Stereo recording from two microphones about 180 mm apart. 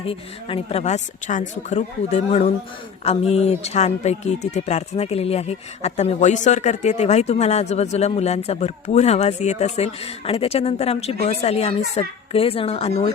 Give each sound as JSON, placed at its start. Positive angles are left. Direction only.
{"t": 0.0, "sound": "speech", "side_deg": 30}